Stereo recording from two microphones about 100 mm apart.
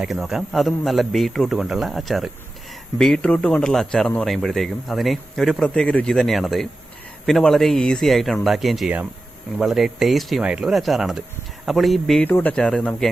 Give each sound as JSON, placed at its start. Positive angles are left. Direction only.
{"t": 0.0, "sound": "a man's voice", "side_deg": 0}
{"t": 12.2, "sound": "a man's voice", "side_deg": 15}